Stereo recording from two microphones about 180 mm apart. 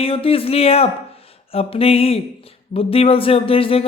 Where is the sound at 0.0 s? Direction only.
30° left (ahead or behind).